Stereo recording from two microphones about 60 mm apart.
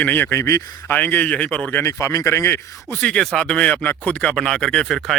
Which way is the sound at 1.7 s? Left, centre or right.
Left.